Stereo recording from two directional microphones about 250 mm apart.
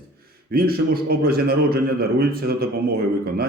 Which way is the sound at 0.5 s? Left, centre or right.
Right.